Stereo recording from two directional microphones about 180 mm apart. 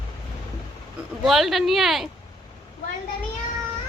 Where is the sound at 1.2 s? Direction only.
Centre (ahead or behind).